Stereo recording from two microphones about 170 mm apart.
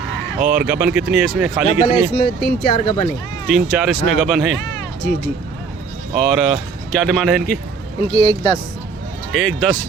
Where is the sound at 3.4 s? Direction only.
Centre (ahead or behind).